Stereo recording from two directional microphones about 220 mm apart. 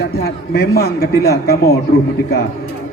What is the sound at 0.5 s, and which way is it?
A man's voice, 45° left (ahead or behind).